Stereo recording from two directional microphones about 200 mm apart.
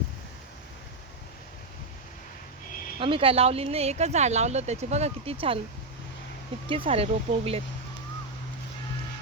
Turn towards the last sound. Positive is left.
turn(degrees=-30)  # may be behind; listen again after turning